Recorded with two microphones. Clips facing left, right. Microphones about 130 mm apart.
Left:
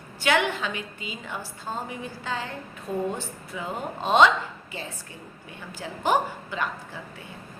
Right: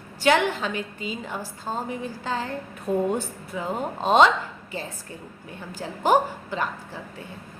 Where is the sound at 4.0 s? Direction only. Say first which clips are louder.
Right 1 dB; 40° right (ahead or behind).